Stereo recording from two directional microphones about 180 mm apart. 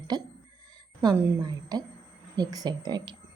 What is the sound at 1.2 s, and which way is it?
Speech, 20° right (ahead or behind).